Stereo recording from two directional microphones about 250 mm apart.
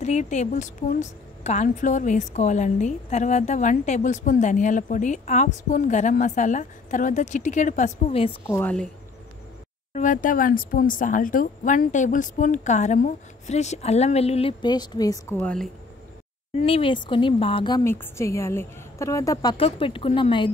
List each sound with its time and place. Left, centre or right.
0.0 s a woman's voice: left
8.5 s a woman's voice: centre
9.9 s a woman's voice: left; by 15.7 s centre
16.5 s a woman's voice: left